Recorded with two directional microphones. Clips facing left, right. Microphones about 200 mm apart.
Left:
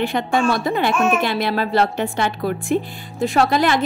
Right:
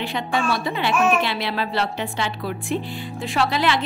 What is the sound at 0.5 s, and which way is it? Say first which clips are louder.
Speech: left 4 dB; 45° left (ahead or behind).